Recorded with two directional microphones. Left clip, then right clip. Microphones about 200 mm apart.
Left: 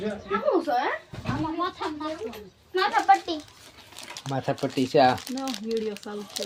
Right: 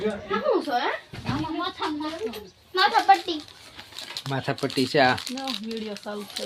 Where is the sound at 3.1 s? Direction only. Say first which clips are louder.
Even; 15° left (ahead or behind).